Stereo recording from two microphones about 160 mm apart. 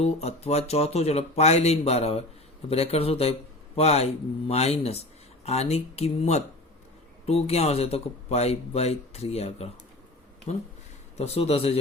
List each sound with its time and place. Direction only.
0.0 s speech: 40° left (ahead or behind)